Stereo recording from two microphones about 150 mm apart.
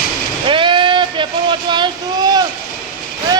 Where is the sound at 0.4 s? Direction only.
35° right (ahead or behind).